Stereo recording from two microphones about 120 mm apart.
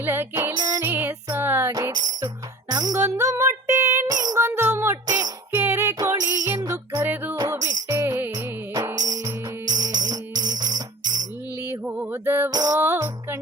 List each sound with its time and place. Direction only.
0.0 s music: 20° right (ahead or behind)
1.7 s music: 35° right (ahead or behind)
3.0 s music: 25° right (ahead or behind)
5.5 s music: 15° right (ahead or behind); by 7.0 s 35° right (ahead or behind)
7.0 s music: 15° right (ahead or behind)
7.4 s music: 25° right (ahead or behind)
9.0 s music: 30° right (ahead or behind)
11.7 s music: 15° right (ahead or behind)
12.5 s music: 35° right (ahead or behind)
12.8 s music: 20° right (ahead or behind)